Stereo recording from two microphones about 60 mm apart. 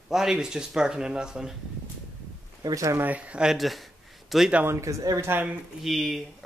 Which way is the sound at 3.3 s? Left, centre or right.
Centre.